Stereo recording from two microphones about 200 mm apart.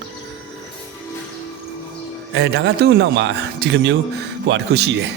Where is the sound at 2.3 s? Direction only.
60° right (ahead or behind).